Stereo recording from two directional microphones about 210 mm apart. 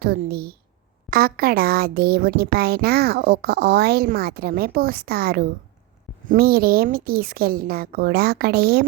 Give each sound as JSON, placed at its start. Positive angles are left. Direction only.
{"t": 0.0, "sound": "speech", "side_deg": -50}